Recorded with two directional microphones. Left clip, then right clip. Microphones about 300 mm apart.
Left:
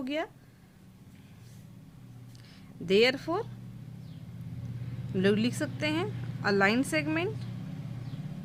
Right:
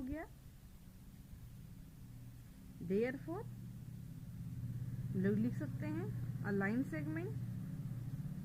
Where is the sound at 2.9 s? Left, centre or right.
Left.